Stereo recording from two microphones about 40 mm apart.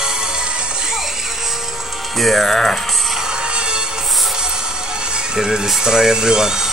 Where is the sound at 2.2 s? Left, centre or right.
Centre.